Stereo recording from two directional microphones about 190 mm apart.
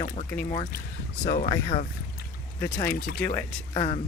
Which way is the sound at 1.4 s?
30° left (ahead or behind).